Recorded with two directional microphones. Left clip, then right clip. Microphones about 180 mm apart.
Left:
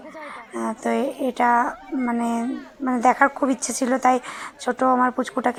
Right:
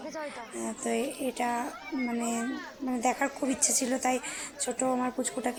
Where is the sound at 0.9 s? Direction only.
60° left (ahead or behind).